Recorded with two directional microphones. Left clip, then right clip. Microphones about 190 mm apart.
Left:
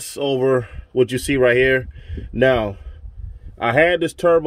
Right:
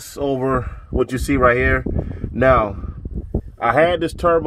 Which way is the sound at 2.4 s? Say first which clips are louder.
Right 2 dB; 15° left (ahead or behind).